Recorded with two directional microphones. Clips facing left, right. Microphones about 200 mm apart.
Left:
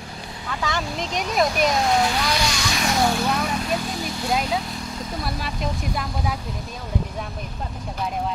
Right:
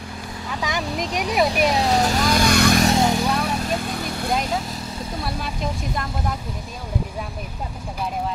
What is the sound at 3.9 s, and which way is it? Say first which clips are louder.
Vehicle: right 1 dB; 60° right (ahead or behind).